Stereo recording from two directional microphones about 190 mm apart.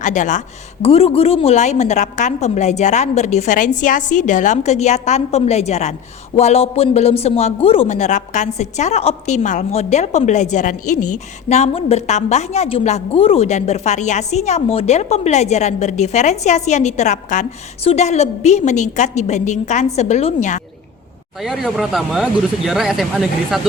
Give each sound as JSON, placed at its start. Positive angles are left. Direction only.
{"t": 0.0, "sound": "a woman's voice", "side_deg": 40}
{"t": 21.4, "sound": "speech", "side_deg": 0}